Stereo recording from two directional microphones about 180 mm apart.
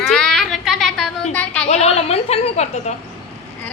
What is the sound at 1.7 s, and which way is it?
A woman's voice, 35° left (ahead or behind).